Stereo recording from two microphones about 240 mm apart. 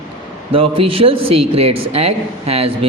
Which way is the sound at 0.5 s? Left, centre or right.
Right.